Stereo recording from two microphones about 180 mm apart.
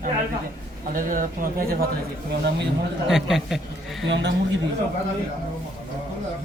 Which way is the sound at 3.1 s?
Centre (ahead or behind).